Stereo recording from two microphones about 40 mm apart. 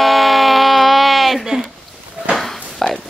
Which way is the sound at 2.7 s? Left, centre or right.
Centre.